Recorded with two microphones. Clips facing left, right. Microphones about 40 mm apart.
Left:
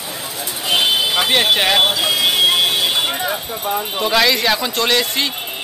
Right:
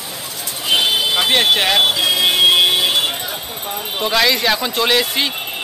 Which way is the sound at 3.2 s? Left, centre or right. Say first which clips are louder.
Left 5 dB; left.